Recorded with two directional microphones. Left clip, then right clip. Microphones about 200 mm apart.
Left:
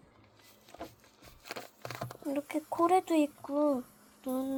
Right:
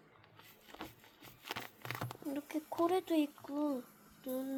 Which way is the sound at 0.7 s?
25° right (ahead or behind).